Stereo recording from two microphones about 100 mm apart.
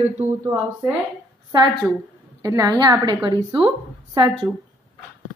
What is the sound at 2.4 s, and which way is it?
A woman's voice, 40° right (ahead or behind).